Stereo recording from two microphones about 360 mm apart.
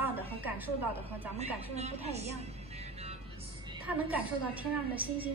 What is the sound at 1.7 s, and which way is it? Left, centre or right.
A woman's voice, centre.